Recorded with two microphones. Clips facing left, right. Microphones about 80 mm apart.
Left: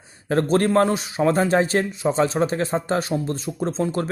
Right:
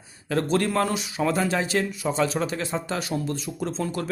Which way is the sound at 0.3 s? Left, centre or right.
Left.